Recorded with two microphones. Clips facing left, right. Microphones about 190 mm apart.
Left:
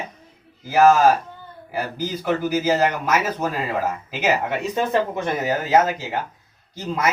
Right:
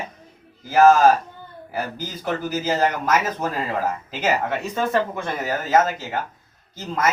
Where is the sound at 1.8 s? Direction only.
10° left (ahead or behind).